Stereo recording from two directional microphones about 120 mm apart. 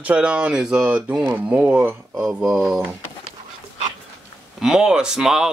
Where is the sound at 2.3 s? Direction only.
Centre (ahead or behind).